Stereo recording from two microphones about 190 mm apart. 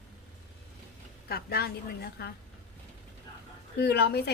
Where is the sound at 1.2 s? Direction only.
55° left (ahead or behind).